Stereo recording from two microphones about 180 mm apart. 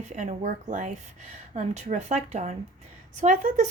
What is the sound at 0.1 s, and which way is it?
Speech, 45° right (ahead or behind).